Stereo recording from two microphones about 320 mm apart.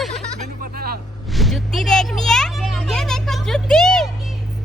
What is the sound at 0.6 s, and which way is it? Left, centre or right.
Vehicle, right.